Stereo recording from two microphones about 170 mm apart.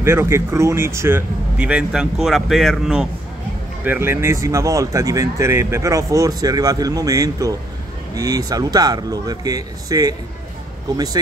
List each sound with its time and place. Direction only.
0.0 s speech: 15° right (ahead or behind)